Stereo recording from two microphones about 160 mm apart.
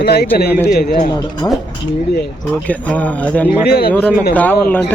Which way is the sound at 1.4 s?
25° left (ahead or behind).